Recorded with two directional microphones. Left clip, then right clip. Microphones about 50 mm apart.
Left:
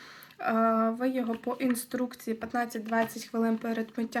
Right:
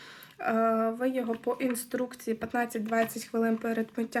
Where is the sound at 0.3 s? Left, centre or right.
Centre.